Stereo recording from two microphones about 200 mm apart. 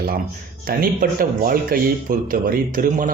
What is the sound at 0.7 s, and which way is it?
Speech, 45° right (ahead or behind).